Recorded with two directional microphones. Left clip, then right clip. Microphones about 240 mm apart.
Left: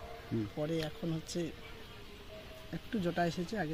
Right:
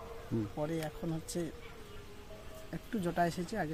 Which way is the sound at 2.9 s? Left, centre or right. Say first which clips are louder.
Right 1 dB; centre.